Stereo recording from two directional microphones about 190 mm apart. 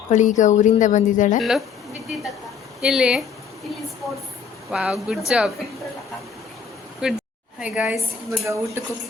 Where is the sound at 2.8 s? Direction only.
Centre (ahead or behind).